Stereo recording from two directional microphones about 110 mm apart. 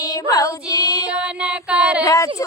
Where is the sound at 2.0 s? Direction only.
30° left (ahead or behind).